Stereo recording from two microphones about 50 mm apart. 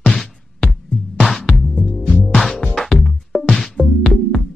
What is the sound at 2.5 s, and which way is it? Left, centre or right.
Music, left.